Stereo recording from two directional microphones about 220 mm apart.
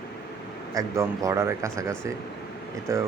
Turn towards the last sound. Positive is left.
turn(degrees=-15)  # may be behind; listen again after turning